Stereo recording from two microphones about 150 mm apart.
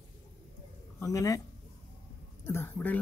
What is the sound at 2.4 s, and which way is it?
Speech, 15° left (ahead or behind).